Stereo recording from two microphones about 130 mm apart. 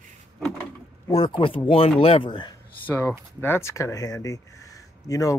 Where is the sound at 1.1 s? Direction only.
45° left (ahead or behind).